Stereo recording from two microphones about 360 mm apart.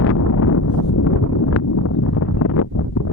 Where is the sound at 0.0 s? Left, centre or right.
Left.